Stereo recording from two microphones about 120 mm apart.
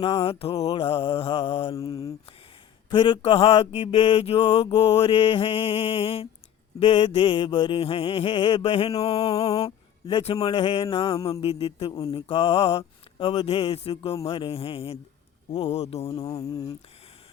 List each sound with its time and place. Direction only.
0.0 s mantra: 55° left (ahead or behind)
1.7 s mantra: 30° left (ahead or behind)
2.9 s mantra: 40° left (ahead or behind)
3.2 s mantra: 50° left (ahead or behind)
6.7 s mantra: 40° left (ahead or behind)
8.4 s mantra: 35° left (ahead or behind)
8.6 s mantra: 55° left (ahead or behind)
11.3 s music: 55° left (ahead or behind)
12.1 s mantra: 45° left (ahead or behind)
15.5 s music: 55° left (ahead or behind)
16.1 s mantra: 30° left (ahead or behind)